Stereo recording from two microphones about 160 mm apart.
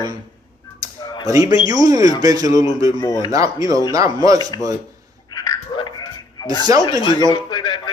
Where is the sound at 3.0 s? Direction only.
30° left (ahead or behind).